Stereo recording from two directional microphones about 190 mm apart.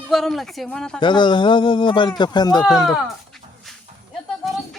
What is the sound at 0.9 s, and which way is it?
Speech, 25° left (ahead or behind).